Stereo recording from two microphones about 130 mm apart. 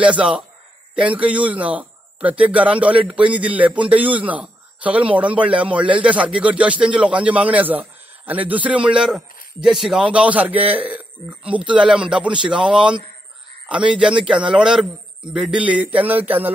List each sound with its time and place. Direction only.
0.0 s a man's voice: 10° right (ahead or behind)
12.5 s a man's voice: 40° right (ahead or behind)
13.8 s a man's voice: 10° right (ahead or behind)